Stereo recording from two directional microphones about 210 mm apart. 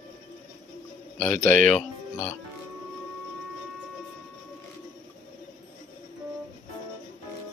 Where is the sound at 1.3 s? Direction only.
40° right (ahead or behind).